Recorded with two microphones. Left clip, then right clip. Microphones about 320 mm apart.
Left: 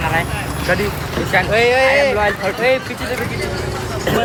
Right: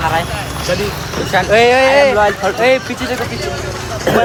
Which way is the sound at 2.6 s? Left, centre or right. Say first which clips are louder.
Right 4 dB; right.